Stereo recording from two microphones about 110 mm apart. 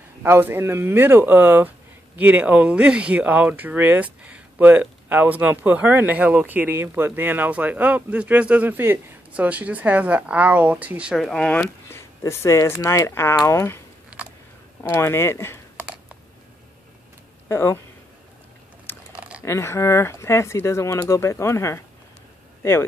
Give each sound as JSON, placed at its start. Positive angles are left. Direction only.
{"t": 0.2, "sound": "speech", "side_deg": -20}
{"t": 11.1, "sound": "speech", "side_deg": 5}
{"t": 11.9, "sound": "speech", "side_deg": 25}
{"t": 14.1, "sound": "a sound", "side_deg": -10}
{"t": 14.8, "sound": "speech", "side_deg": 25}
{"t": 17.5, "sound": "speech", "side_deg": 25}
{"t": 19.1, "sound": "a sound", "side_deg": -10}
{"t": 19.4, "sound": "speech", "side_deg": 25}